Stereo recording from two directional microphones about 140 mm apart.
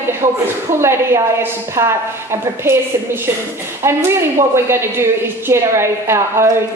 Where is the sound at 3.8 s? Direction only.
20° right (ahead or behind).